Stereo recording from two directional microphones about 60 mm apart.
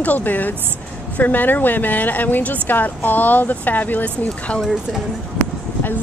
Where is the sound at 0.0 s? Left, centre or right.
Left.